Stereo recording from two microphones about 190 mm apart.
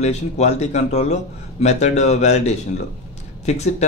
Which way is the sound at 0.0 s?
35° left (ahead or behind).